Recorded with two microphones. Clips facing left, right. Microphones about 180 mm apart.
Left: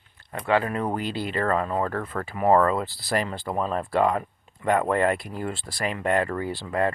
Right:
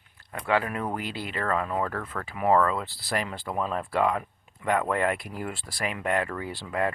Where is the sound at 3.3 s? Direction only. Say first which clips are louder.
Left 3 dB; 30° left (ahead or behind).